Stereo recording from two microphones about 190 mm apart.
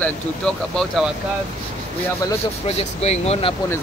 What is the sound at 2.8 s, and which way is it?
Speech, 30° left (ahead or behind).